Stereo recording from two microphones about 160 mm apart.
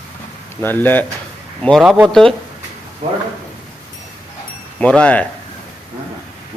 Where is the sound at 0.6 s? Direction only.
10° left (ahead or behind).